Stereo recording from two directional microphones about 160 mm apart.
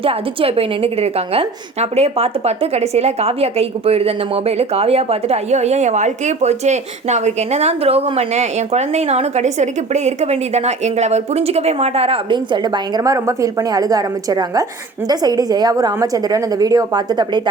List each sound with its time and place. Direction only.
0.0 s a woman's voice: 35° right (ahead or behind)